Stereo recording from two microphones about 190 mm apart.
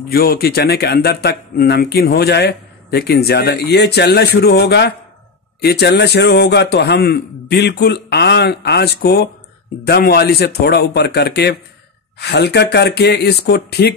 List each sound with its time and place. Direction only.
0.1 s speech: 55° left (ahead or behind)